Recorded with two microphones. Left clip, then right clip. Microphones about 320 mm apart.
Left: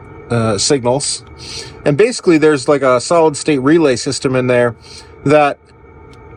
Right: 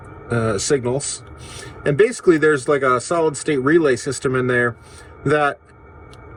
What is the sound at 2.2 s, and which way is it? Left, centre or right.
Speech, left.